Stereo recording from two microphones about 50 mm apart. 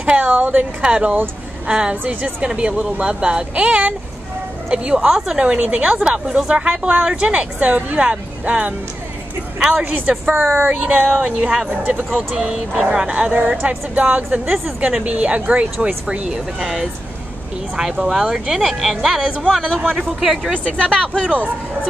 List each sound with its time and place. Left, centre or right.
0.0 s a sound: right
0.3 s a sound: right
0.8 s speech: right
5.0 s speech: centre
5.4 s speech: right
6.0 s speech: centre
9.6 s speech: centre
10.2 s speech: right
10.7 s a woman's voice: right
14.9 s speech: right
16.3 s speech: centre
19.6 s speech: centre
20.1 s speech: centre
20.5 s speech: left